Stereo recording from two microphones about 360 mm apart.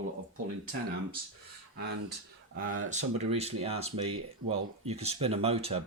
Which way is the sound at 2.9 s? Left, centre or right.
Centre.